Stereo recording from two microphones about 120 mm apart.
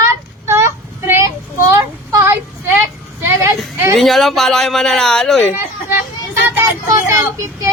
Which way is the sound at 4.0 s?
Centre (ahead or behind).